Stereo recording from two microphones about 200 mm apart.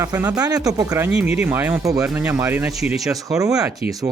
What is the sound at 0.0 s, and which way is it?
Speech, 15° right (ahead or behind).